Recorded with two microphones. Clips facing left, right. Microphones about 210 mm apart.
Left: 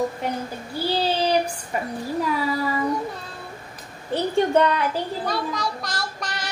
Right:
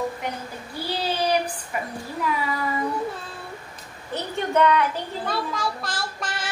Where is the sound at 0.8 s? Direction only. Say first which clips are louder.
Left 3 dB; 30° left (ahead or behind).